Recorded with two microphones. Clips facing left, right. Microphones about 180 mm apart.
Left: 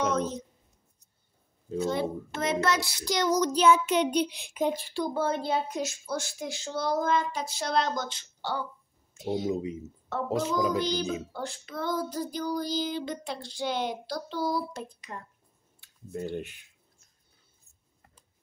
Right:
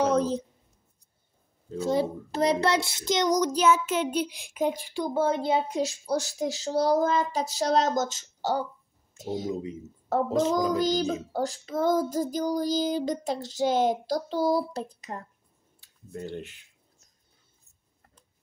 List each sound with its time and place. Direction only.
0.0 s a sound: 30° right (ahead or behind)
1.9 s a child's voice: 35° right (ahead or behind); by 5.8 s 20° right (ahead or behind)
5.8 s child singing: 35° right (ahead or behind)
9.1 s speech: 45° right (ahead or behind)
9.5 s speech: 15° left (ahead or behind)
10.0 s child singing: 40° right (ahead or behind)
16.2 s speech: 15° left (ahead or behind)